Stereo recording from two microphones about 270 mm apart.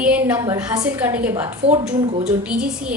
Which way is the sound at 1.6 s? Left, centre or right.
Right.